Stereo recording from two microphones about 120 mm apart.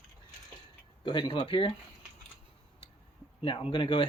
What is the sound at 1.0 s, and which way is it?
Speech, 40° left (ahead or behind).